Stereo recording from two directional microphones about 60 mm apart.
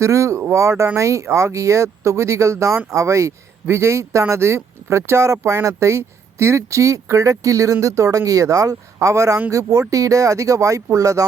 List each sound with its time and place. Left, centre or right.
0.0 s speech: right